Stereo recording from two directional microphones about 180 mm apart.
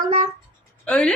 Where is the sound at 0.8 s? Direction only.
5° left (ahead or behind).